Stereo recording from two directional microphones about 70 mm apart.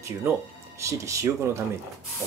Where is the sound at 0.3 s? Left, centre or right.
Right.